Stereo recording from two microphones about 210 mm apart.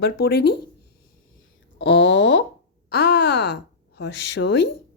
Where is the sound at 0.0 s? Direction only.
50° left (ahead or behind).